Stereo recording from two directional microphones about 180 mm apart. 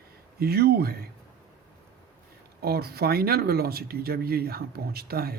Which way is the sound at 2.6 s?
60° right (ahead or behind).